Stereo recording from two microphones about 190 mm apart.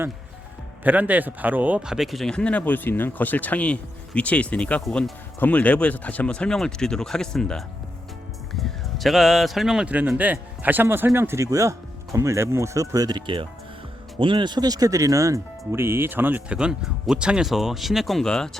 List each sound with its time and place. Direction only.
0.9 s speech: 10° right (ahead or behind)